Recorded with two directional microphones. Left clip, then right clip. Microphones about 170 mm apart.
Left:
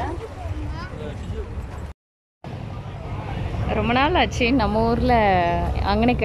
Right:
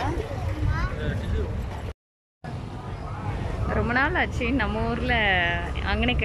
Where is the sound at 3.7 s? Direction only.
15° left (ahead or behind).